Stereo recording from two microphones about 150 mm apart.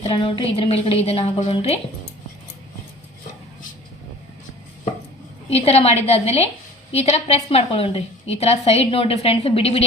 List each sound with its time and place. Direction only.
0.0 s a woman's voice: 35° left (ahead or behind)
5.5 s a woman's voice: 40° left (ahead or behind)